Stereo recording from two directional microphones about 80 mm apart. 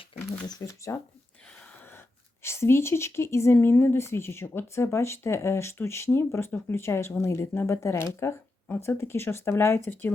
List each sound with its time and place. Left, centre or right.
0.4 s speech: left
2.4 s a woman's voice: left